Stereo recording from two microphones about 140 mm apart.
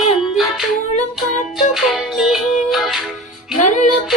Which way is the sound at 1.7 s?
Centre (ahead or behind).